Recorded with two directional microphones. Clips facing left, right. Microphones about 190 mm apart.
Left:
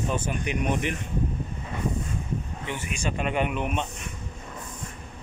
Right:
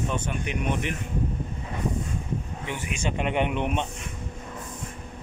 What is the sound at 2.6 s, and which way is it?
Speech, 15° right (ahead or behind).